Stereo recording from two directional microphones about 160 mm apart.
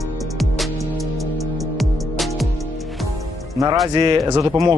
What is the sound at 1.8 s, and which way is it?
Music, centre (ahead or behind).